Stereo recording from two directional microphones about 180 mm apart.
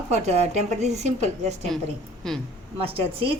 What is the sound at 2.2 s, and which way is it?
Speech, centre (ahead or behind).